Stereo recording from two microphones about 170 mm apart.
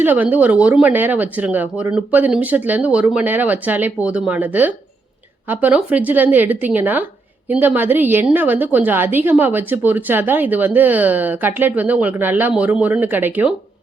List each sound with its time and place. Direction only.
0.0 s speech: 10° right (ahead or behind)